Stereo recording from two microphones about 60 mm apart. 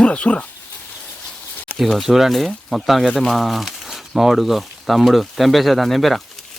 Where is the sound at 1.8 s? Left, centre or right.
Centre.